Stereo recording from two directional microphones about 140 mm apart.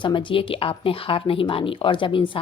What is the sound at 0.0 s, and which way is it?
Speech, 35° left (ahead or behind).